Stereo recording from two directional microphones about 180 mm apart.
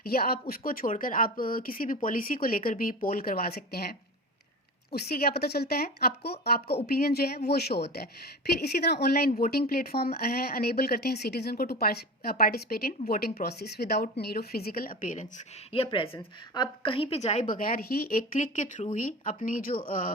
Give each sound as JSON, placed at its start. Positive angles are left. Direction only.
{"t": 0.0, "sound": "speech", "side_deg": 55}
{"t": 17.5, "sound": "speech", "side_deg": 50}